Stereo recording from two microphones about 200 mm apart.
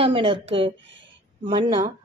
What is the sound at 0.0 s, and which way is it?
A woman's voice, 25° right (ahead or behind).